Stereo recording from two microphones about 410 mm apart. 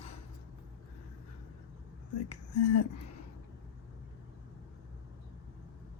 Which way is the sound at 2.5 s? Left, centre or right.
Left.